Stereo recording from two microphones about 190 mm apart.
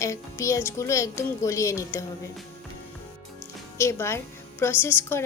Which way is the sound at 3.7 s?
15° left (ahead or behind).